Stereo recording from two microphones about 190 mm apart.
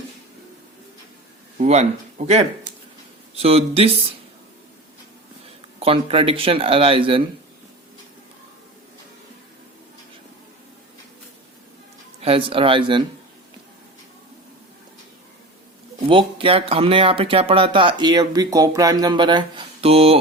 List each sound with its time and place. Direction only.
1.5 s speech: 35° right (ahead or behind)
5.8 s speech: 30° right (ahead or behind)
12.2 s speech: 30° right (ahead or behind)
16.0 s speech: 25° right (ahead or behind)